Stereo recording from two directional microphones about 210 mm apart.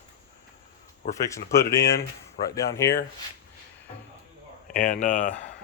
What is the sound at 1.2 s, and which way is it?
Speech, 15° left (ahead or behind).